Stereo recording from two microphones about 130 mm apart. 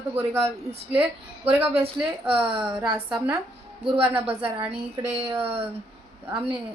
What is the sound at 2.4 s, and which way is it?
A woman's voice, 40° right (ahead or behind).